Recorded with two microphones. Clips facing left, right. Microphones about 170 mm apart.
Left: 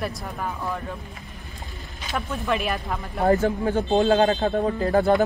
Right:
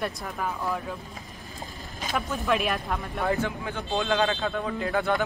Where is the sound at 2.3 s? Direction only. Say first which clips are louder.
Left 1 dB; centre (ahead or behind).